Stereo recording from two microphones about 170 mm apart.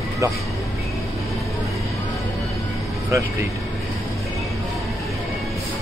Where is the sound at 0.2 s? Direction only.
20° right (ahead or behind).